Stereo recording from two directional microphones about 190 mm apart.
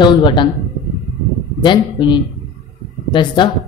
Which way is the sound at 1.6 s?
25° left (ahead or behind).